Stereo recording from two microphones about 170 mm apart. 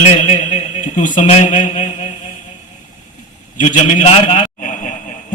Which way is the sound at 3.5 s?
45° left (ahead or behind).